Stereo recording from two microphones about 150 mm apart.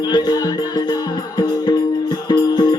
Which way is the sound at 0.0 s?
25° left (ahead or behind).